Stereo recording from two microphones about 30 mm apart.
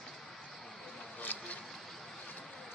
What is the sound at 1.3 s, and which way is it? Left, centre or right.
Vehicle, left.